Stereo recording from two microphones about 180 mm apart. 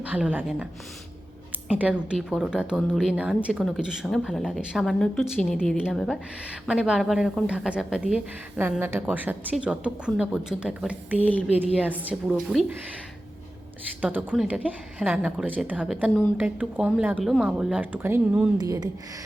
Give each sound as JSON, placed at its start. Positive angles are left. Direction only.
{"t": 0.0, "sound": "a woman's voice", "side_deg": -10}
{"t": 14.0, "sound": "a woman's voice", "side_deg": -10}
{"t": 18.5, "sound": "speech", "side_deg": -20}